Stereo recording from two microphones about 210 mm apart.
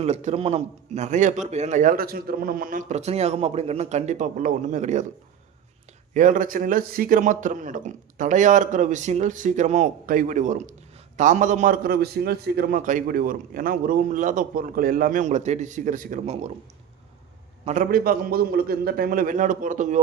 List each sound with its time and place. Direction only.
0.0 s a man's voice: 30° right (ahead or behind)
6.1 s a man's voice: 40° right (ahead or behind)
17.7 s a man's voice: 40° right (ahead or behind)